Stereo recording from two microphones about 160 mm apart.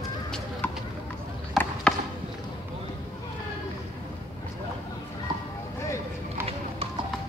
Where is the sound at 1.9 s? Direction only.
5° left (ahead or behind).